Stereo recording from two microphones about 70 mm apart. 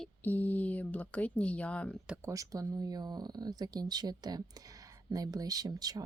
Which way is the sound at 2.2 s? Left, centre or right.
Right.